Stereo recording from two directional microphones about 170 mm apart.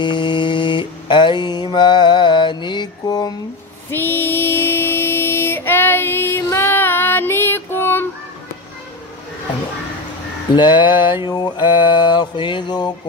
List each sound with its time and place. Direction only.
0.0 s mantra: 25° left (ahead or behind)
3.9 s a sound: 10° left (ahead or behind)
6.4 s child singing: 15° left (ahead or behind)
10.5 s mantra: 25° left (ahead or behind)